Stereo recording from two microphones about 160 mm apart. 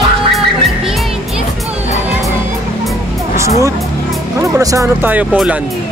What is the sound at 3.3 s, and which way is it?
Music, 20° right (ahead or behind).